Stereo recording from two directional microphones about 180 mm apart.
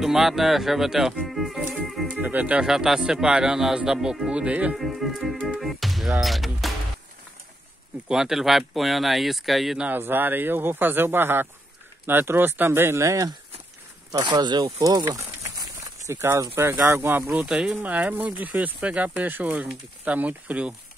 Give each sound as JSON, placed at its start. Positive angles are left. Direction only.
{"t": 0.0, "sound": "speech", "side_deg": 0}
{"t": 8.1, "sound": "speech", "side_deg": 0}